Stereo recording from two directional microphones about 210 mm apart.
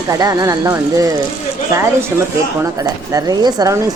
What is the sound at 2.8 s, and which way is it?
Speech, 15° right (ahead or behind).